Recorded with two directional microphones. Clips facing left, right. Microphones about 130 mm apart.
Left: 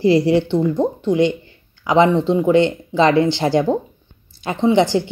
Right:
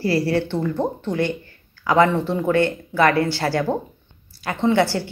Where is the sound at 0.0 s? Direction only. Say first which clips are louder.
Left 6 dB; 20° left (ahead or behind).